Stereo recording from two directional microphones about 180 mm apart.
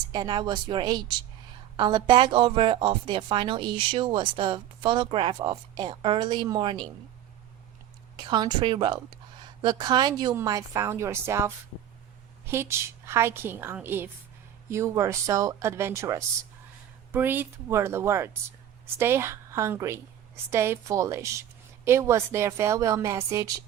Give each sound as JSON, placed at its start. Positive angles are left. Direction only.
{"t": 0.1, "sound": "a woman's voice", "side_deg": -25}
{"t": 8.1, "sound": "a woman's voice", "side_deg": -25}